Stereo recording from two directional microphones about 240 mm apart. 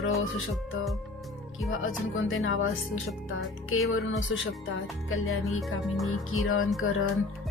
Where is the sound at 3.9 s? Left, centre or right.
Left.